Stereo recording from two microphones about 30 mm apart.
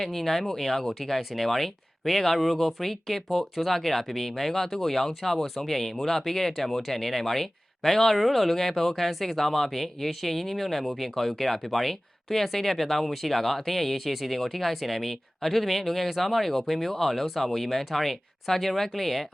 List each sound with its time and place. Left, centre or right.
0.0 s speech: centre